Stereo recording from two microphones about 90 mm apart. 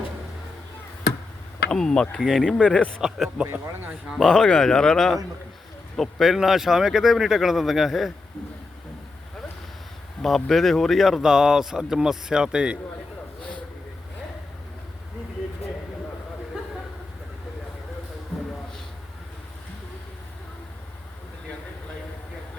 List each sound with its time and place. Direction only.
1.7 s speech: 10° left (ahead or behind)
3.0 s speech: 5° right (ahead or behind)
3.4 s speech: 25° right (ahead or behind)
4.1 s speech: 5° left (ahead or behind)
10.2 s speech: centre (ahead or behind)